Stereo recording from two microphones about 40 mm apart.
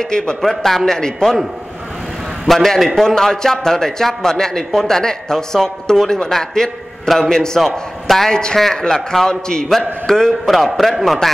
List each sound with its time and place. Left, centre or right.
0.0 s speech: centre
0.7 s a man's voice: centre
2.4 s speech: centre
8.3 s a man's voice: centre
10.4 s a man's voice: centre